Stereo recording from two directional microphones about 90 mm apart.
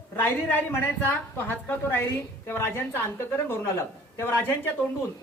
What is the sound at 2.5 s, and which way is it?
Speech, 25° left (ahead or behind).